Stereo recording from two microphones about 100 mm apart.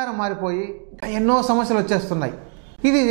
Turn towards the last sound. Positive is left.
turn(degrees=-15)  # may be behind; listen again after turning